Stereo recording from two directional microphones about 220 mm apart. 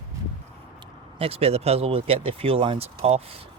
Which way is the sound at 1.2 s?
25° right (ahead or behind).